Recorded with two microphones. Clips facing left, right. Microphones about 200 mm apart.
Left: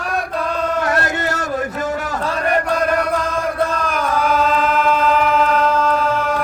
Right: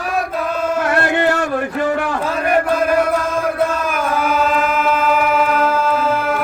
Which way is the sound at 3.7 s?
5° right (ahead or behind).